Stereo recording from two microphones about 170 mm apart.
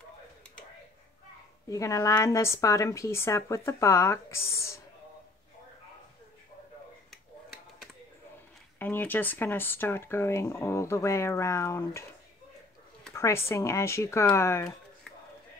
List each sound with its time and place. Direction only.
1.7 s speech: 20° left (ahead or behind)
8.7 s speech: 10° left (ahead or behind)
13.1 s speech: 15° left (ahead or behind)